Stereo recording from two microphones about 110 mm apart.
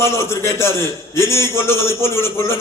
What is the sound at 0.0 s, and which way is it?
A man's voice, 25° left (ahead or behind).